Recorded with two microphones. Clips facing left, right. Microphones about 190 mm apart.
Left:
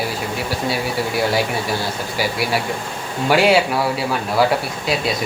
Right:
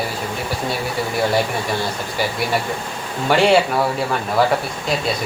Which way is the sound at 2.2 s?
5° left (ahead or behind).